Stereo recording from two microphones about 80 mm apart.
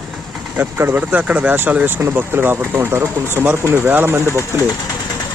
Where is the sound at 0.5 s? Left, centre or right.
Right.